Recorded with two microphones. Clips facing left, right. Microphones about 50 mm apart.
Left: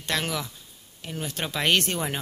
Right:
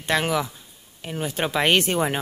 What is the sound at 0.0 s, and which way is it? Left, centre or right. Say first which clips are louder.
Speech: right 6 dB; centre.